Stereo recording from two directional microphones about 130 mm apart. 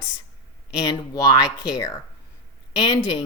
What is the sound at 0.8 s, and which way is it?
Speech, 30° left (ahead or behind).